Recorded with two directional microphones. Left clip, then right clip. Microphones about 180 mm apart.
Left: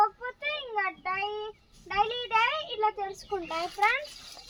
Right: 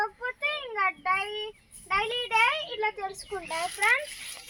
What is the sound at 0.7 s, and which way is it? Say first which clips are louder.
Child singing: right 4 dB; 10° left (ahead or behind).